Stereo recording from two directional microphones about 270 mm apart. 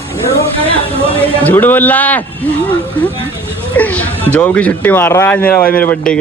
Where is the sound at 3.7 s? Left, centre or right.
Centre.